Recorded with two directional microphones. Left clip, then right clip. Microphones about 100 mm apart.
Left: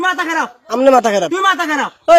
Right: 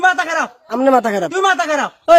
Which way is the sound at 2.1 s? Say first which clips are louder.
Left 1 dB; 35° right (ahead or behind).